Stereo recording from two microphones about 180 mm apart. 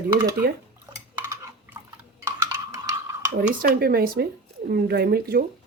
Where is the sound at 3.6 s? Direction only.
55° right (ahead or behind).